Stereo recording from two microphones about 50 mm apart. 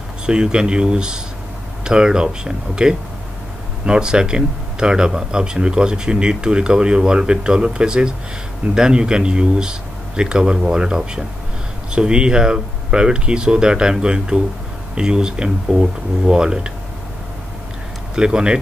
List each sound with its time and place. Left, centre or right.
0.3 s speech: centre
18.1 s speech: centre